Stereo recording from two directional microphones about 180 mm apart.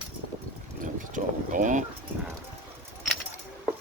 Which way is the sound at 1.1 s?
45° right (ahead or behind).